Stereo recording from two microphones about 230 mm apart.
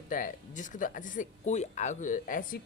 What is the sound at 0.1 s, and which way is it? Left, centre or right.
Speech, left.